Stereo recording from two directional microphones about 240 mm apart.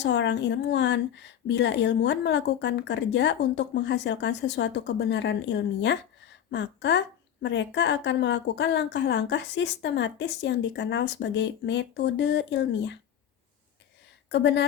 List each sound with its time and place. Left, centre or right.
0.0 s speech: left
14.3 s a woman's voice: left